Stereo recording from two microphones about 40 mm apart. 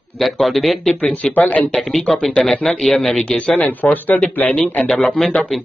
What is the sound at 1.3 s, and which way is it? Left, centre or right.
Speech, left.